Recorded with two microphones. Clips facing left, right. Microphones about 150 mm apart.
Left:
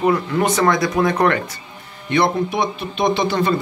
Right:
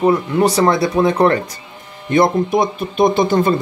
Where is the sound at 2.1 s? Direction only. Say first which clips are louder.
Right 4 dB; 45° right (ahead or behind).